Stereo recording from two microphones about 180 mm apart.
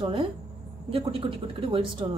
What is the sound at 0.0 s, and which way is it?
A woman's voice, 30° right (ahead or behind).